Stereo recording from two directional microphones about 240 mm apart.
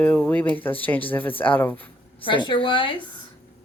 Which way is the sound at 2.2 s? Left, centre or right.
Left.